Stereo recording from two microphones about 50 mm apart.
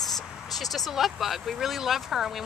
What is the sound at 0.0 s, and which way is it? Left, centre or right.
Speech, centre.